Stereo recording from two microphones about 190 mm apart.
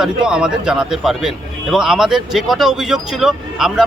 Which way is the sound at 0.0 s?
5° right (ahead or behind).